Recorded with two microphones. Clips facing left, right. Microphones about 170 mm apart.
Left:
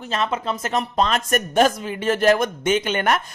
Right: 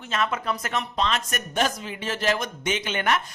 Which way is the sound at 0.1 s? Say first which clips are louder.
Left 3 dB; 30° left (ahead or behind).